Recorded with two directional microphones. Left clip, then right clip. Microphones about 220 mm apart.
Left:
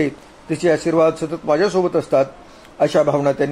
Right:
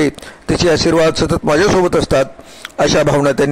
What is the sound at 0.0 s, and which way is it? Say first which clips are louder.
A man's voice: right 5 dB; 45° right (ahead or behind).